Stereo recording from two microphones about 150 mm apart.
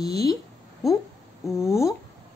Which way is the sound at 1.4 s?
20° left (ahead or behind).